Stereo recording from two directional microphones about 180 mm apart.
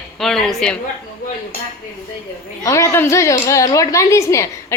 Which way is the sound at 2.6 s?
15° left (ahead or behind).